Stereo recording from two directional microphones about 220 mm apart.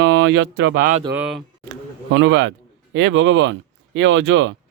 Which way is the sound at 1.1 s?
5° right (ahead or behind).